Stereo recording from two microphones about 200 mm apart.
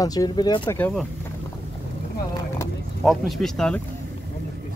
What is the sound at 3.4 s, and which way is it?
Speech, centre (ahead or behind).